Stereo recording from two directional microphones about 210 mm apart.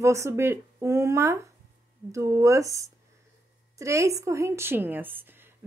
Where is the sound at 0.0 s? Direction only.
15° right (ahead or behind).